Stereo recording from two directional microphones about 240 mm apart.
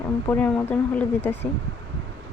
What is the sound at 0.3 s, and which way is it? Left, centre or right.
Speech, centre.